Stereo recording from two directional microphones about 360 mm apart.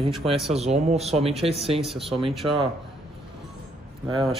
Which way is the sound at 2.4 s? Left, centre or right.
Centre.